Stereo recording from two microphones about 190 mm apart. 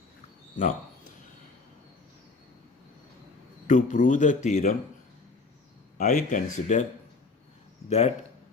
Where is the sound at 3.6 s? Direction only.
40° left (ahead or behind).